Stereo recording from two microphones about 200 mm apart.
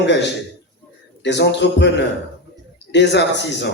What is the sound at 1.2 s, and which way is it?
A man's voice, 60° left (ahead or behind).